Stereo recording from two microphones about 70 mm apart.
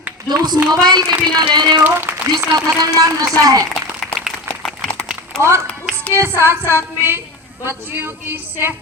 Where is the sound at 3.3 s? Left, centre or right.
Right.